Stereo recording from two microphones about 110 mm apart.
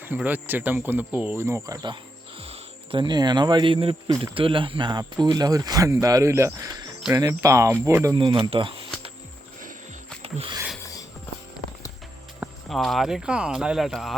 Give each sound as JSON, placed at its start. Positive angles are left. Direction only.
{"t": 0.0, "sound": "speech", "side_deg": -15}
{"t": 1.4, "sound": "speech", "side_deg": -25}
{"t": 2.4, "sound": "speech", "side_deg": -55}
{"t": 8.2, "sound": "speech", "side_deg": -50}
{"t": 10.2, "sound": "speech", "side_deg": -65}
{"t": 12.6, "sound": "speech", "side_deg": 0}